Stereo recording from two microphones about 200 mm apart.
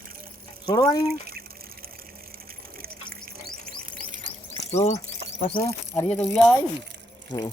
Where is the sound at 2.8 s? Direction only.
50° right (ahead or behind).